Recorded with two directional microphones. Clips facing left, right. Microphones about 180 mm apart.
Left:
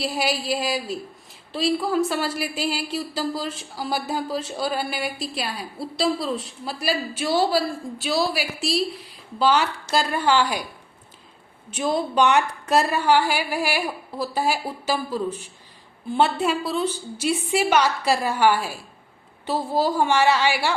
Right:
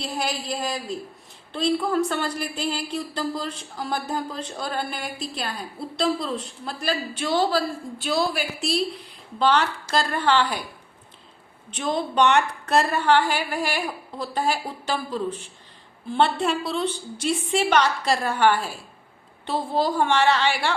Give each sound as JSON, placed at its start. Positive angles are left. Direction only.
{"t": 0.0, "sound": "a woman's voice", "side_deg": 5}
{"t": 11.7, "sound": "a woman's voice", "side_deg": 10}